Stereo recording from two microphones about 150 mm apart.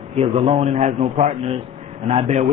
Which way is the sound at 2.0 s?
50° right (ahead or behind).